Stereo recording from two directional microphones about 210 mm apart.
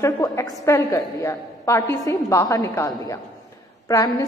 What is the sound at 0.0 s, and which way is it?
A woman's voice, 15° left (ahead or behind).